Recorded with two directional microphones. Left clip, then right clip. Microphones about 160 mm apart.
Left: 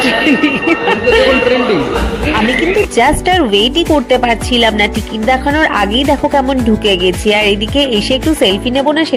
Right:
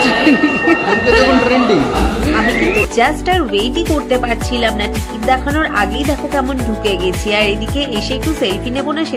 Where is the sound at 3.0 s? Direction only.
30° left (ahead or behind).